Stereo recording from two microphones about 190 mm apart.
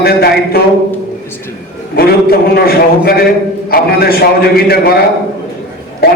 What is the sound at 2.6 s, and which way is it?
A man's voice, 55° left (ahead or behind).